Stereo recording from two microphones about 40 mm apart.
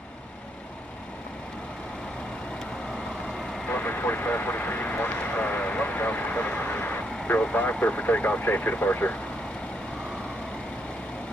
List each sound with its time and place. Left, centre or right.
3.7 s vehicle: left
7.5 s speech: left